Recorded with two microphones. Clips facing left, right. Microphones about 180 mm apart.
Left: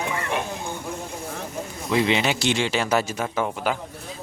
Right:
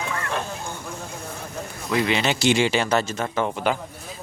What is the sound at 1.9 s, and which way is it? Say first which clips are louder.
Speech: left 1 dB; 20° left (ahead or behind).